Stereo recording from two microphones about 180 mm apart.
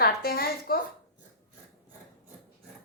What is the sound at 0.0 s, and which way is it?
Speech, 60° left (ahead or behind).